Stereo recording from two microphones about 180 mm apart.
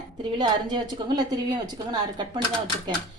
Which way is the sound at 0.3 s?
25° right (ahead or behind).